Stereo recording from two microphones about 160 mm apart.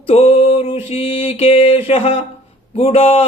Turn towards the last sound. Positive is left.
turn(degrees=35)  # may be behind; listen again after turning